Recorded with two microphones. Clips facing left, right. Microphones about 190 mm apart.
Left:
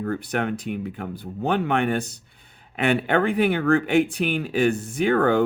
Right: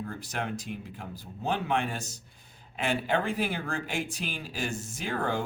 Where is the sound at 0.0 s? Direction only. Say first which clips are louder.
Left 10 dB; 60° left (ahead or behind).